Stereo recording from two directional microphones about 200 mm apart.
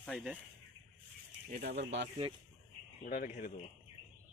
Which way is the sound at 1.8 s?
60° right (ahead or behind).